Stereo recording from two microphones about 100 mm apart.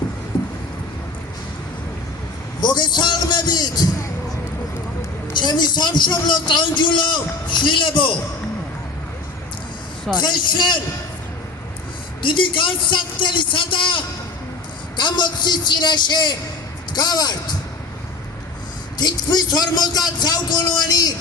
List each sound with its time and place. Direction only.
0.3 s a sound: 55° left (ahead or behind)
2.6 s a sound: 45° left (ahead or behind)
5.3 s a woman's voice: 50° left (ahead or behind)
10.2 s a man's voice: 50° left (ahead or behind)
12.2 s a man's voice: 55° left (ahead or behind)
18.9 s a man's voice: 45° left (ahead or behind)